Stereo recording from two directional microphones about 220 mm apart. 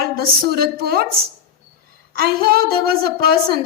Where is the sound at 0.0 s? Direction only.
45° right (ahead or behind).